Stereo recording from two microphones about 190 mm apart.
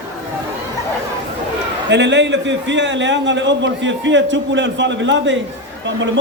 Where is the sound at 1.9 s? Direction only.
70° right (ahead or behind).